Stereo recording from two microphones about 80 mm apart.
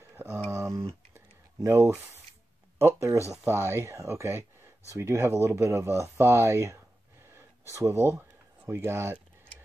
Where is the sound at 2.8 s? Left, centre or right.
Right.